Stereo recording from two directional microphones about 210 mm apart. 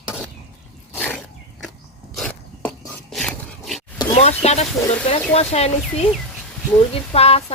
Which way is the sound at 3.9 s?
30° left (ahead or behind).